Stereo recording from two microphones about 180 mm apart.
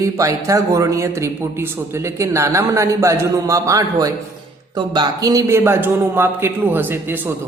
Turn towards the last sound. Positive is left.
turn(degrees=-10)  # may be behind; listen again after turning